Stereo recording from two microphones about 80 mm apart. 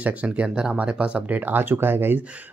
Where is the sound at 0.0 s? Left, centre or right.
Centre.